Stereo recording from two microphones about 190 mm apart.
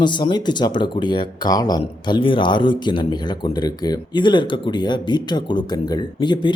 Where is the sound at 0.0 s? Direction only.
25° left (ahead or behind).